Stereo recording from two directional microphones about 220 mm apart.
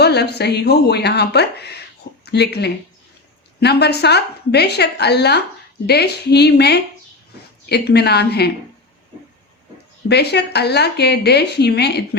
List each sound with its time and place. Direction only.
0.0 s speech: 50° left (ahead or behind)
10.1 s speech: 50° left (ahead or behind)